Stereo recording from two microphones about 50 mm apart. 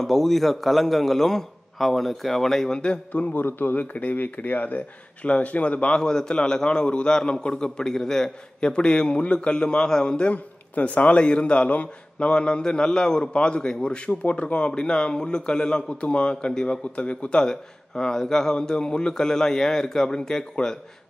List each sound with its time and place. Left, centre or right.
0.0 s a man's voice: centre
3.1 s a man's voice: left; by 20.8 s centre